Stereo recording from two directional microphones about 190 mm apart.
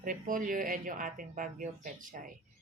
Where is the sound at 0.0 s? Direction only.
45° right (ahead or behind).